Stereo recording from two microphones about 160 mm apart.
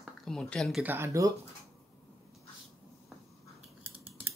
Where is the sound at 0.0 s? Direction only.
Centre (ahead or behind).